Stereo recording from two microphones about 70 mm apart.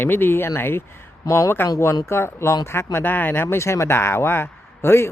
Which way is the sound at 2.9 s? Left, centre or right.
Left.